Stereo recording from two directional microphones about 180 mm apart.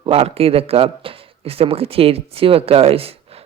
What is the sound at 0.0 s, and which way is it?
A man's voice, 35° right (ahead or behind).